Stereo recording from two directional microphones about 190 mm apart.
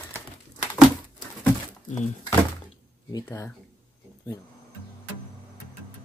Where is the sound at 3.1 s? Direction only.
15° left (ahead or behind).